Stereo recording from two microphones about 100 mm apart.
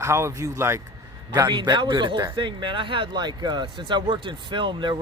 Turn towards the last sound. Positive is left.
turn(degrees=-50)  # may be behind; listen again after turning